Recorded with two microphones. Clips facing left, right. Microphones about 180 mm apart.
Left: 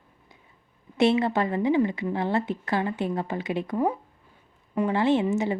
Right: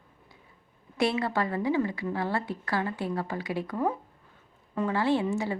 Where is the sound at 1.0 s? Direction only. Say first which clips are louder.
Left 5 dB; 20° left (ahead or behind).